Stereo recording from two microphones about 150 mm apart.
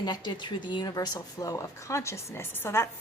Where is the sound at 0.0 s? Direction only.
30° left (ahead or behind).